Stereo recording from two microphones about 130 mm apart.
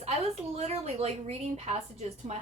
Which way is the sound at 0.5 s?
55° right (ahead or behind).